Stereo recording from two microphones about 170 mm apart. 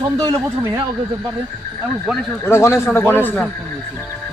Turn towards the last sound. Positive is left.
turn(degrees=10)  # may be behind; listen again after turning